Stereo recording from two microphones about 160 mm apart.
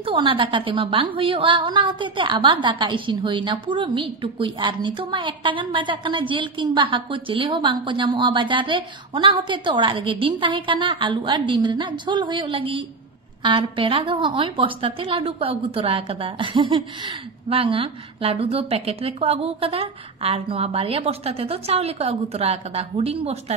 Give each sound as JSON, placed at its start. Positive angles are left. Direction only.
{"t": 0.0, "sound": "a woman's voice", "side_deg": -35}